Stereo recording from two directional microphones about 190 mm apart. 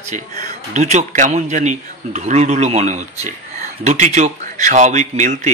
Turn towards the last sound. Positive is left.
turn(degrees=-40)  # may be behind; listen again after turning